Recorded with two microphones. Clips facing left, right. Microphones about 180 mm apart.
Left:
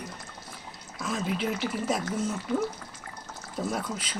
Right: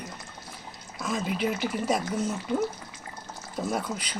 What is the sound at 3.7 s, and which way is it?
Speech, centre (ahead or behind).